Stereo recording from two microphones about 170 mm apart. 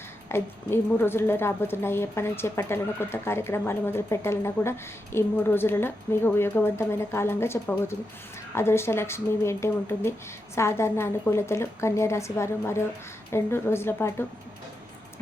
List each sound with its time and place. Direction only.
0.3 s a woman's voice: 15° left (ahead or behind)